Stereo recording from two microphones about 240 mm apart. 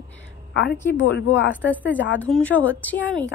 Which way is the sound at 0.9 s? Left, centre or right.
Left.